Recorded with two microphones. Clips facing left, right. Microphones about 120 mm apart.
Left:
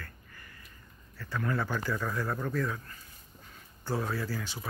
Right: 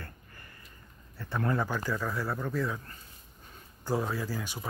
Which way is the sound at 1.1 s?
25° right (ahead or behind).